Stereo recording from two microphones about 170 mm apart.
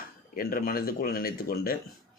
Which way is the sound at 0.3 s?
60° left (ahead or behind).